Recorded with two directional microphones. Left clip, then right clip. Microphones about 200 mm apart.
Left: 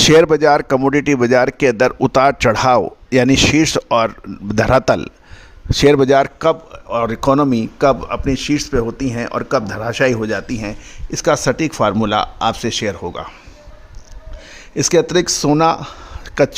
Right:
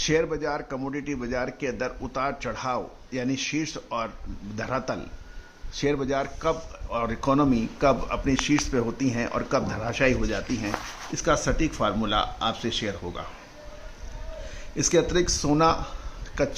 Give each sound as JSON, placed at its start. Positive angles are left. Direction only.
{"t": 0.0, "sound": "a man's voice", "side_deg": 55}
{"t": 14.8, "sound": "speech", "side_deg": 55}